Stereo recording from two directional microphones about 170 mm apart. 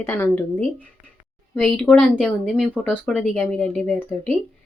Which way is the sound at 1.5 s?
5° left (ahead or behind).